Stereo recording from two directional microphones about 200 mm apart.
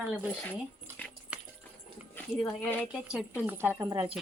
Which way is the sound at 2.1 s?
10° left (ahead or behind).